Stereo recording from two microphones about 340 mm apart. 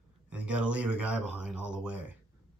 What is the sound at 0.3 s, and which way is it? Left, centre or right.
Speech, centre.